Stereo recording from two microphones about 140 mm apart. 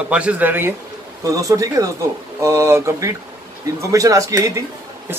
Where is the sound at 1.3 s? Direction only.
25° right (ahead or behind).